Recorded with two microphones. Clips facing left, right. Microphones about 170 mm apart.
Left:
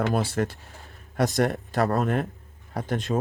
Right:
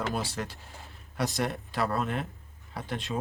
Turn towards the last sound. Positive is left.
turn(degrees=45)  # may be behind; listen again after turning